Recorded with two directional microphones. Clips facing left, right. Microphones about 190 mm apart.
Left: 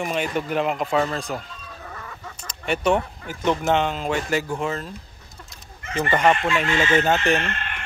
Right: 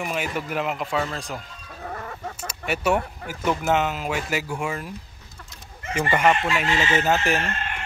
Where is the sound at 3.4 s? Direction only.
5° right (ahead or behind).